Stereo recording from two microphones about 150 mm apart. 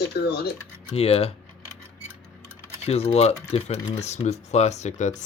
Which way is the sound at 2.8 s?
45° left (ahead or behind).